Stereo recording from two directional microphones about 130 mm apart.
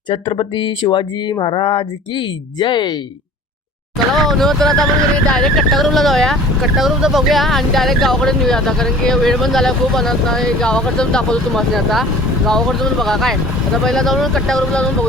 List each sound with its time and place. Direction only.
0.1 s speech: 40° left (ahead or behind)
4.1 s speech: centre (ahead or behind)